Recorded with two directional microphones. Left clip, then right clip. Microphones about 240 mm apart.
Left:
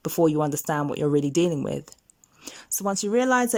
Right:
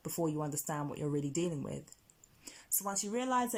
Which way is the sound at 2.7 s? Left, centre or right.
Left.